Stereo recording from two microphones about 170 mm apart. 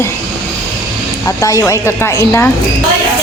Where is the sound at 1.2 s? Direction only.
20° left (ahead or behind).